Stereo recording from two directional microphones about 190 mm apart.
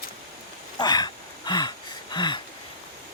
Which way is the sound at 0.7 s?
20° left (ahead or behind).